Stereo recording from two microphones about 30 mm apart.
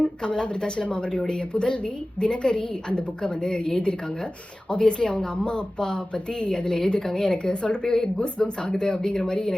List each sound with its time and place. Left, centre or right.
0.0 s a woman's voice: left
9.0 s a woman's voice: left